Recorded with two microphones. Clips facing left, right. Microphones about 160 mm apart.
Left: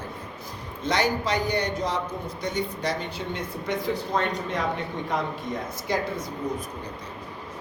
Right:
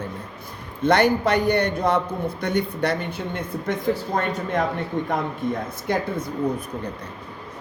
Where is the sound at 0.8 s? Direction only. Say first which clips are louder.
Right 7 dB; 60° right (ahead or behind).